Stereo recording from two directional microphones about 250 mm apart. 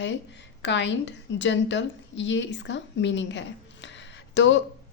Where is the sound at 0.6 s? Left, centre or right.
Left.